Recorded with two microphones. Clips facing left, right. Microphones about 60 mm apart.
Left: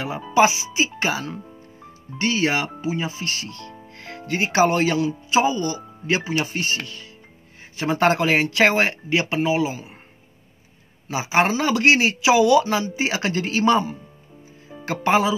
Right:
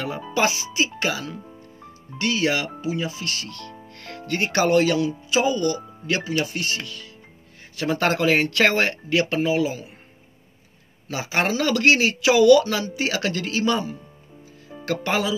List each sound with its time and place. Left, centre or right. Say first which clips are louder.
0.3 s speech: left 6 dB; centre
3.8 s music: left 1 dB; centre
4.3 s speech: left 1 dB; centre
11.1 s speech: left 4 dB; centre